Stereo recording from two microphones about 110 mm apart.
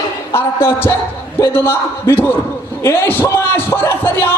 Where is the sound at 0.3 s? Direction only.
20° left (ahead or behind).